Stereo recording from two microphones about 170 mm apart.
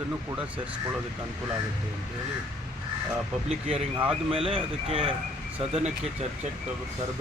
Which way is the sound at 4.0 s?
5° right (ahead or behind).